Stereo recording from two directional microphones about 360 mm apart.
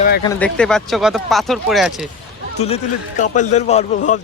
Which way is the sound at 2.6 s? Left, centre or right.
Centre.